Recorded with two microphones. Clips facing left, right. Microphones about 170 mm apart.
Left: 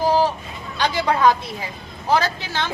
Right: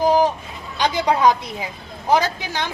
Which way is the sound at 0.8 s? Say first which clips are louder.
Right 1 dB; 15° right (ahead or behind).